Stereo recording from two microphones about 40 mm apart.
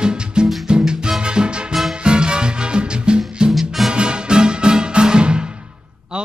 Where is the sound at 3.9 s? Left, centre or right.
Right.